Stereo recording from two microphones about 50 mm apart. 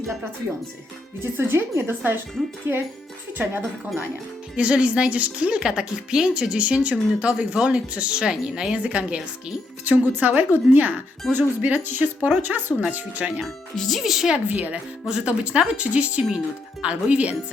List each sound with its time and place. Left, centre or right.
1.2 s speech: right
3.4 s speech: right
4.5 s a woman's voice: right
9.8 s speech: right
13.4 s speech: centre
14.3 s speech: right
15.0 s a woman's voice: centre